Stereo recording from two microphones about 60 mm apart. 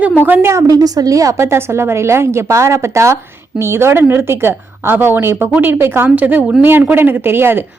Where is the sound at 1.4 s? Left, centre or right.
Right.